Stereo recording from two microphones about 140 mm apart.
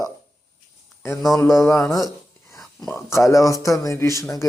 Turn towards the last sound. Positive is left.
turn(degrees=20)  # may be behind; listen again after turning